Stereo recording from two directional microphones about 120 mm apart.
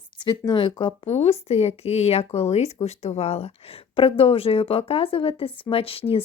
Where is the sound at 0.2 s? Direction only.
40° left (ahead or behind).